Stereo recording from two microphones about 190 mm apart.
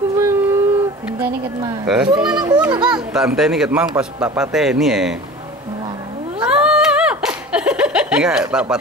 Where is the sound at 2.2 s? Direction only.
20° right (ahead or behind).